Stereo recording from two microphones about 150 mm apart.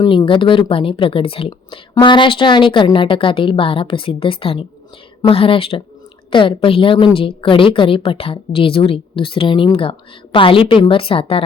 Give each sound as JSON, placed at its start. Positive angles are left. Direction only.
{"t": 0.0, "sound": "speech", "side_deg": 30}